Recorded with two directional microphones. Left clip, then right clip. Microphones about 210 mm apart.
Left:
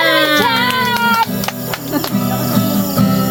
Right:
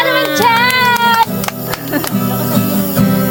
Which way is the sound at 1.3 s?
50° right (ahead or behind).